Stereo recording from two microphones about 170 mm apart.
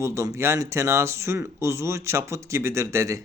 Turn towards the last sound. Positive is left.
turn(degrees=-15)  # may be behind; listen again after turning